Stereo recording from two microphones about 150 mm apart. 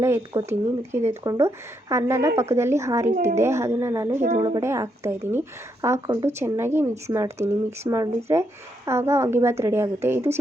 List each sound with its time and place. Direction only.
0.0 s speech: 20° right (ahead or behind)
3.1 s speech: 50° right (ahead or behind)
3.3 s speech: 20° right (ahead or behind)